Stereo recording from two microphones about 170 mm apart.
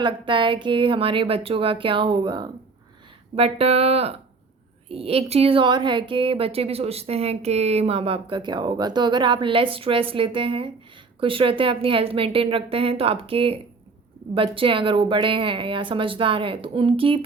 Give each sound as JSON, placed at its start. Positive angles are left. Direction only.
{"t": 0.0, "sound": "speech", "side_deg": -30}
{"t": 3.3, "sound": "a woman's voice", "side_deg": -35}